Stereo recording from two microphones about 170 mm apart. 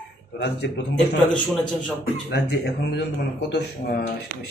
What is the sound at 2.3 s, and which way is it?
Speech, 80° left.